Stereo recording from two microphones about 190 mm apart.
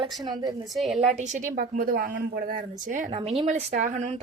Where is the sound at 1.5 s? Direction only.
50° right (ahead or behind).